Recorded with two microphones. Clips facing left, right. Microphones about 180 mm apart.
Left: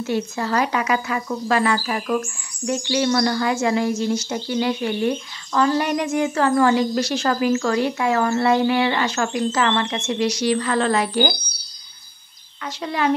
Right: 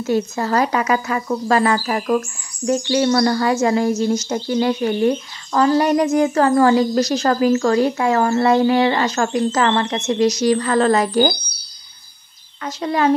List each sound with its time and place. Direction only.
0.0 s speech: 40° right (ahead or behind)
12.6 s speech: 40° right (ahead or behind)